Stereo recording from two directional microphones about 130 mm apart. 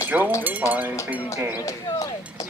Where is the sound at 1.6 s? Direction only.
25° left (ahead or behind).